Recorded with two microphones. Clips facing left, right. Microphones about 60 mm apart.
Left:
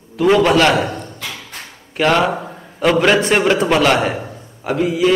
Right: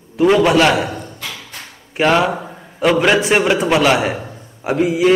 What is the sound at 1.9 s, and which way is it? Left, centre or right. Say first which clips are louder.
Speech: right 1 dB; centre.